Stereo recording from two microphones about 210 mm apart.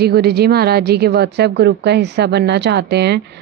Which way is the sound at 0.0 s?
50° right (ahead or behind).